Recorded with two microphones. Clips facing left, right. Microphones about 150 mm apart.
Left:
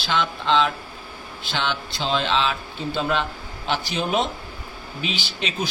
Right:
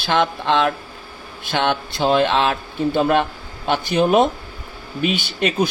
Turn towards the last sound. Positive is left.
turn(degrees=-55)  # may be behind; listen again after turning